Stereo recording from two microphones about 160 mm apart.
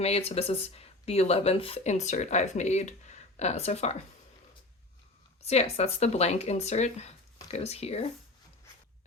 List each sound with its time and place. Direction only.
0.0 s speech: 40° left (ahead or behind)
5.5 s speech: 40° left (ahead or behind)